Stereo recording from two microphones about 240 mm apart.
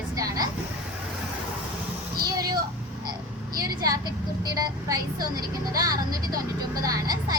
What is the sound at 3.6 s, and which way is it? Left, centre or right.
Speech, centre.